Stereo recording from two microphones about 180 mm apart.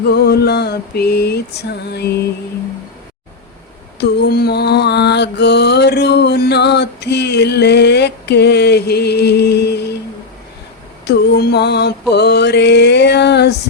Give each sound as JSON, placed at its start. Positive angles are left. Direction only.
{"t": 0.1, "sound": "mantra", "side_deg": 65}
{"t": 4.0, "sound": "music", "side_deg": 65}
{"t": 11.0, "sound": "music", "side_deg": 65}